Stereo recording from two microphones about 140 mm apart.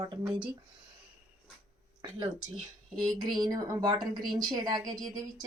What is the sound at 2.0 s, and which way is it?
A woman's voice, 30° right (ahead or behind).